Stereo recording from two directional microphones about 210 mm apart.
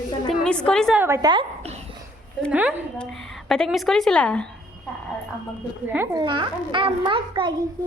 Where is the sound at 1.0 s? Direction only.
15° right (ahead or behind).